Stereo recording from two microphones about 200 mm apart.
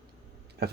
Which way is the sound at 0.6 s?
55° right (ahead or behind).